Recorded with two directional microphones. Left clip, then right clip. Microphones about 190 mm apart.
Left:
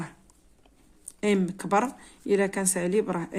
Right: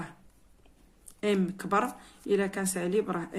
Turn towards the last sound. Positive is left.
turn(degrees=40)  # may be behind; listen again after turning